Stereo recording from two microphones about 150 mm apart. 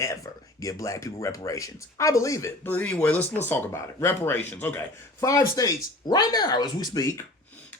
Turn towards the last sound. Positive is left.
turn(degrees=20)  # may be behind; listen again after turning